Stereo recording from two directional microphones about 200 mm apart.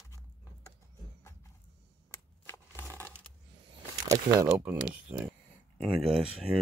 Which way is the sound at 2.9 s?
10° right (ahead or behind).